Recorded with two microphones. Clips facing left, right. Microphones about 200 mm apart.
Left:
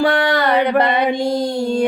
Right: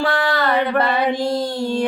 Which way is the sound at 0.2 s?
20° left (ahead or behind).